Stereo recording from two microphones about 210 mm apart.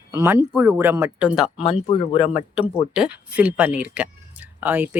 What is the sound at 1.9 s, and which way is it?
Speech, 25° left (ahead or behind).